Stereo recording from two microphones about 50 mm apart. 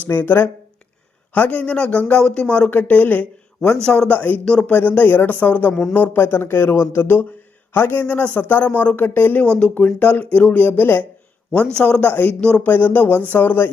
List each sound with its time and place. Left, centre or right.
0.1 s speech: left
1.3 s a man's voice: left
2.6 s speech: left
3.6 s a man's voice: centre
4.1 s speech: left
4.4 s a man's voice: centre
4.7 s speech: left
8.0 s a man's voice: left
9.4 s a man's voice: left
9.7 s speech: left
11.7 s a man's voice: left
12.4 s a man's voice: centre
12.6 s speech: left